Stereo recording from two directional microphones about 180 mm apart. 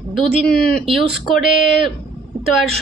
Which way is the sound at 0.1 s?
Centre (ahead or behind).